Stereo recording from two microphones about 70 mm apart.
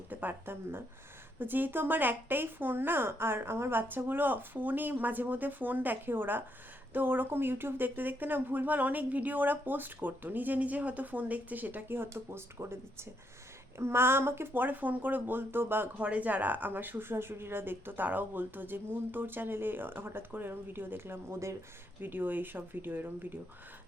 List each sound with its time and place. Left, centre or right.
0.1 s speech: right
12.0 s speech: right
16.0 s speech: centre